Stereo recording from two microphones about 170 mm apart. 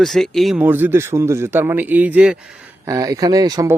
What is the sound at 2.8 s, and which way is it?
Speech, 20° right (ahead or behind).